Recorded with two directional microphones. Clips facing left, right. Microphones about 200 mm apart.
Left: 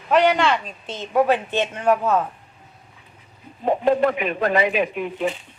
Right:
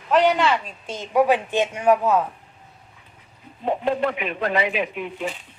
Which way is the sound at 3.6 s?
45° left (ahead or behind).